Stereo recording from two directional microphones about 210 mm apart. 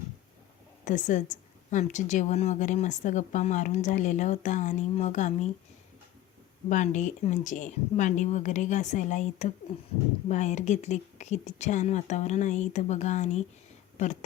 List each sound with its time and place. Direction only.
0.9 s speech: 35° left (ahead or behind)
6.7 s speech: 35° left (ahead or behind)